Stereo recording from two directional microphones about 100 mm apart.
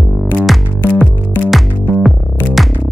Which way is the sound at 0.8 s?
15° left (ahead or behind).